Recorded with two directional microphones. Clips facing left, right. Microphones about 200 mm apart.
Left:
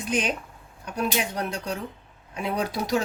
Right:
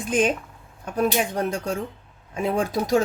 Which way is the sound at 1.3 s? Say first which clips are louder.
Right 5 dB; 50° right (ahead or behind).